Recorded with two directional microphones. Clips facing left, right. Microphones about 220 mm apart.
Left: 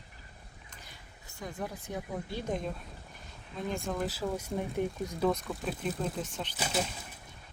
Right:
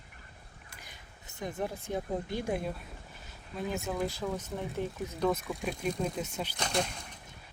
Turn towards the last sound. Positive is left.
turn(degrees=5)  # may be behind; listen again after turning